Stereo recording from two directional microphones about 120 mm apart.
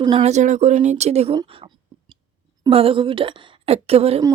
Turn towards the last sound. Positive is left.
turn(degrees=-55)  # may be behind; listen again after turning